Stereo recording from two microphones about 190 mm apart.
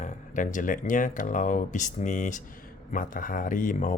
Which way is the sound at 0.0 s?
40° left (ahead or behind).